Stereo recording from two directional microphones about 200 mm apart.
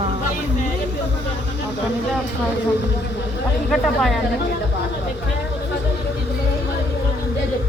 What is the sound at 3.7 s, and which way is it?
Speech, centre (ahead or behind).